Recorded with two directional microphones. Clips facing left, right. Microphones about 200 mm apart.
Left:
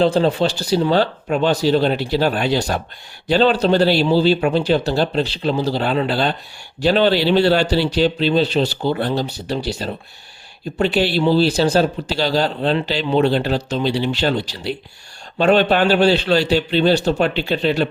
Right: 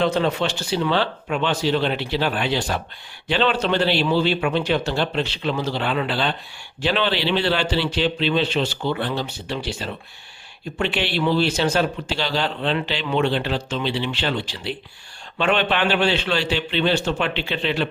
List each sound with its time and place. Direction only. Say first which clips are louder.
0.0 s speech: left 5 dB; 30° left (ahead or behind)